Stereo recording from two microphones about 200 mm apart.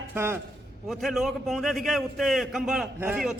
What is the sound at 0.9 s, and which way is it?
A man's voice, centre (ahead or behind).